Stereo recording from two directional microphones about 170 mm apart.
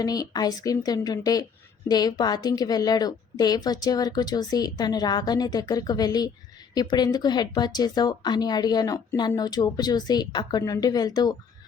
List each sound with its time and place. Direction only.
0.0 s a woman's voice: 20° left (ahead or behind)